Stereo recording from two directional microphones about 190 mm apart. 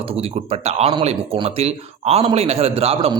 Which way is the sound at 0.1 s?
35° right (ahead or behind).